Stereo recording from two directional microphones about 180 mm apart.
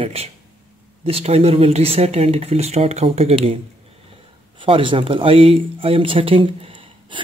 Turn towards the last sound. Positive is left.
turn(degrees=-30)  # may be behind; listen again after turning